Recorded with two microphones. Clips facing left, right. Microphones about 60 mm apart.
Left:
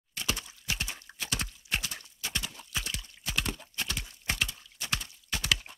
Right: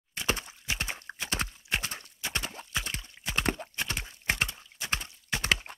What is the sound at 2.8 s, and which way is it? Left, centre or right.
Horse, right.